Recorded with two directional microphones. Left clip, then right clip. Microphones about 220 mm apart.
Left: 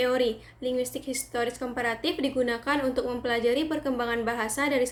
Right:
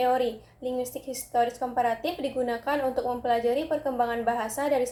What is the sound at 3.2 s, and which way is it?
A woman's voice, 60° left (ahead or behind).